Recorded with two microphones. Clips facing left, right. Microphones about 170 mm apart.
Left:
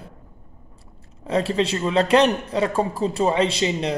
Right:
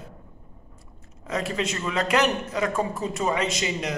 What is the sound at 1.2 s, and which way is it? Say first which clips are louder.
A man's voice: left 6 dB; 30° left (ahead or behind).